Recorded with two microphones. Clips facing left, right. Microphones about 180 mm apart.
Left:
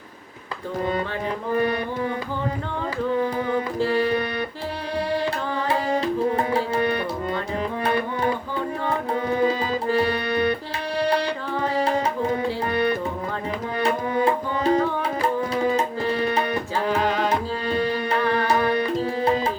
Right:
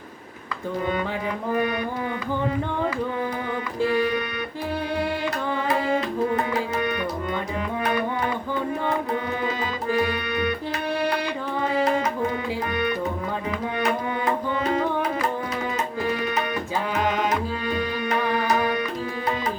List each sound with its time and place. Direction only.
3.9 s music: 35° left (ahead or behind)
5.6 s tabla: 30° left (ahead or behind)
9.4 s music: 35° left (ahead or behind)
11.8 s tabla: 30° left (ahead or behind)
12.7 s music: 35° left (ahead or behind)
17.2 s tabla: 35° left (ahead or behind)
18.2 s music: 15° right (ahead or behind)
18.4 s music: 35° left (ahead or behind)